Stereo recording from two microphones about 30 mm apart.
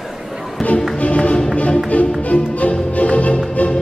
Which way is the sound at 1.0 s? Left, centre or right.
Left.